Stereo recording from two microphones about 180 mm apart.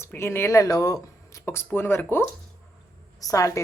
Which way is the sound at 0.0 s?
15° left (ahead or behind).